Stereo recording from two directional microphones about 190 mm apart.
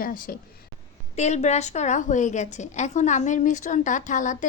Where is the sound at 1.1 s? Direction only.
35° left (ahead or behind).